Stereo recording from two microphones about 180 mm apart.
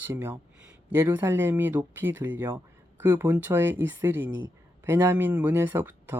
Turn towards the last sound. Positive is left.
turn(degrees=-10)  # may be behind; listen again after turning